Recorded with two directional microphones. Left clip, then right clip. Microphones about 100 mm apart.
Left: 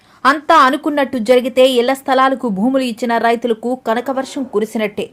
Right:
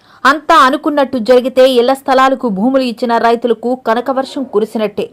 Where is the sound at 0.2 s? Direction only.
20° right (ahead or behind).